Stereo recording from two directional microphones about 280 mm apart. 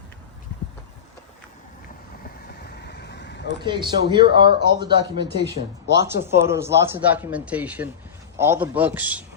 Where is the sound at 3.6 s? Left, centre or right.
Centre.